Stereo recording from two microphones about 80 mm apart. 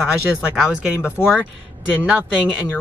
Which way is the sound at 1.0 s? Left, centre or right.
Left.